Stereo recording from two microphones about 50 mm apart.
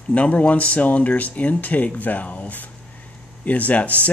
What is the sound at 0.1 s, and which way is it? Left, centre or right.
Speech, left.